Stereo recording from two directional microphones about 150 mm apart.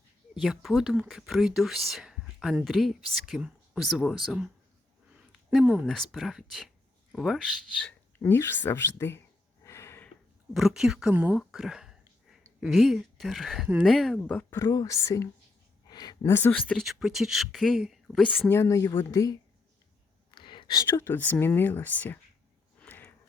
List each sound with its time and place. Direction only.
0.3 s speech: centre (ahead or behind)
5.5 s speech: 5° right (ahead or behind); by 9.2 s 15° left (ahead or behind)
9.6 s snort: 20° left (ahead or behind)
10.5 s speech: 5° right (ahead or behind); by 19.4 s 20° left (ahead or behind)
20.3 s a sound: 35° left (ahead or behind)
20.8 s speech: 15° left (ahead or behind)
22.8 s a sound: 10° left (ahead or behind)